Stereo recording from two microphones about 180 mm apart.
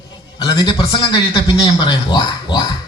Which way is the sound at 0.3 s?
20° left (ahead or behind).